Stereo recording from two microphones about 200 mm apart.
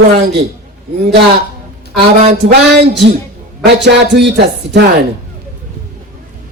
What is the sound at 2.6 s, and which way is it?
Speech, 60° right (ahead or behind).